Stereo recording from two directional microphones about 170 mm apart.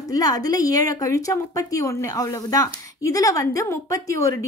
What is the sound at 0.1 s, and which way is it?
A woman's voice, 20° left (ahead or behind).